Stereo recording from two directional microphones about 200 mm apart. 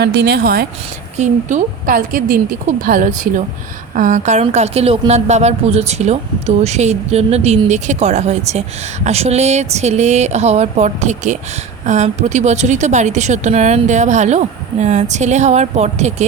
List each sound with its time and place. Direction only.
0.0 s a woman's voice: 60° right (ahead or behind)
1.2 s a woman's voice: 35° right (ahead or behind)